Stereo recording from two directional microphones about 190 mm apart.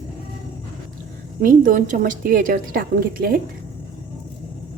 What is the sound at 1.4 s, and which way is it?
A woman's voice, 45° right (ahead or behind).